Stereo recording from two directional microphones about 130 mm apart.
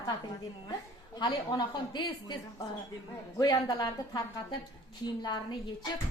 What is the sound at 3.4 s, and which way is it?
A woman's voice, 35° left (ahead or behind).